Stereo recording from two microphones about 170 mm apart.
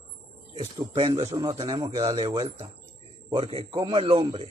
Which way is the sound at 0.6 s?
30° right (ahead or behind).